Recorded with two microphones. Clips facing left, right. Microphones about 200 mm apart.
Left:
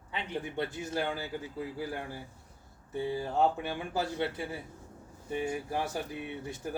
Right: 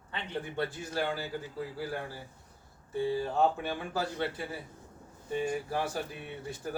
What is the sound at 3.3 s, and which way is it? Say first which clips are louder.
Speech: even; 20° left (ahead or behind).